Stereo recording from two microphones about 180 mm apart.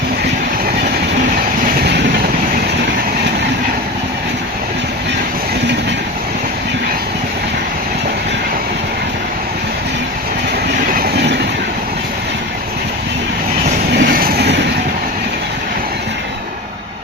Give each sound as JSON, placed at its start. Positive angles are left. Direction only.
{"t": 10.9, "sound": "train", "side_deg": -65}
{"t": 13.9, "sound": "train", "side_deg": -60}